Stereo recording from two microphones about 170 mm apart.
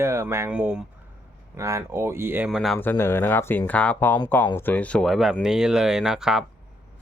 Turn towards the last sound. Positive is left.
turn(degrees=-5)  # may be behind; listen again after turning